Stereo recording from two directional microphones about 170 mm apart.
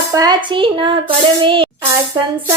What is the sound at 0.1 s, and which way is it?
Speech, 25° right (ahead or behind).